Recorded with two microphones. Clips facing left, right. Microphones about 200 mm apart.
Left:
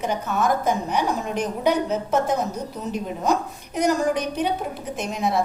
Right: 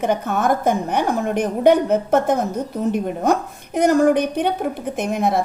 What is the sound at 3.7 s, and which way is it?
A woman's voice, 55° right (ahead or behind).